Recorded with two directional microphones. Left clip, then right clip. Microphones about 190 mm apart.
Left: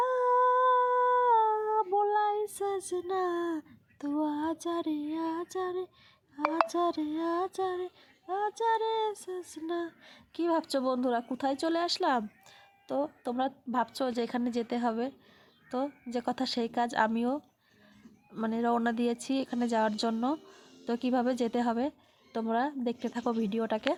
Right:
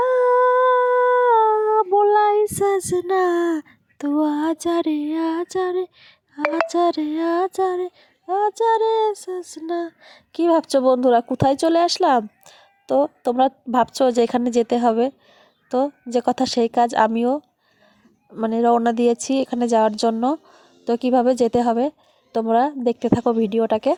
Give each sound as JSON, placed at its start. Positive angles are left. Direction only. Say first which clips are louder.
{"t": 0.0, "sound": "humming", "louder": "right 10 dB", "side_deg": -30}
{"t": 8.3, "sound": "female singing", "louder": "right 11 dB", "side_deg": -35}